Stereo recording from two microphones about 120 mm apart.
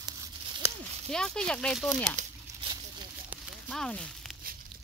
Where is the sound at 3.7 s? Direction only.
5° left (ahead or behind).